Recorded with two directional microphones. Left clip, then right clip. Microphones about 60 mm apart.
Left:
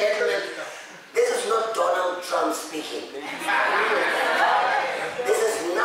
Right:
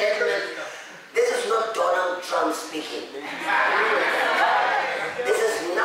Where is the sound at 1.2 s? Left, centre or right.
Centre.